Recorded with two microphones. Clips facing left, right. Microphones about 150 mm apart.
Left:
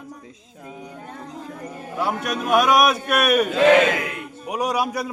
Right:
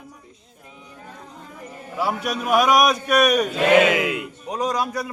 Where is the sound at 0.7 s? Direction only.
50° left (ahead or behind).